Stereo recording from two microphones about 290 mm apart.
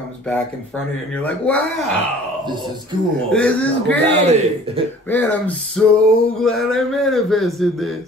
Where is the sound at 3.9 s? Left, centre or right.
Right.